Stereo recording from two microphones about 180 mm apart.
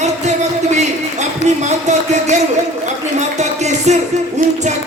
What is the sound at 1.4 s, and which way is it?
Speech, 40° right (ahead or behind).